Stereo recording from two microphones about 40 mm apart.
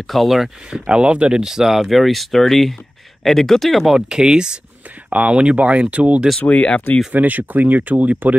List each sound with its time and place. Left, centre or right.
0.0 s speech: centre
0.7 s speech: right
1.4 s speech: centre
4.1 s speech: centre
5.1 s speech: right
6.4 s speech: left
7.2 s speech: right